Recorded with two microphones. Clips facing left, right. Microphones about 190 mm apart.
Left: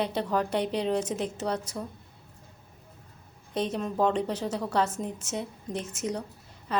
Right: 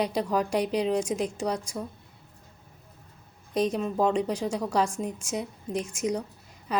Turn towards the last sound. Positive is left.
turn(degrees=-10)  # may be behind; listen again after turning